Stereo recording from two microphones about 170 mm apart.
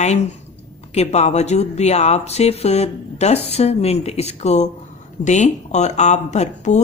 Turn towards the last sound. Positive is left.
turn(degrees=45)  # may be behind; listen again after turning